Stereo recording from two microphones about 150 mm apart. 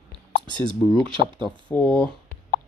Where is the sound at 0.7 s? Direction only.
5° left (ahead or behind).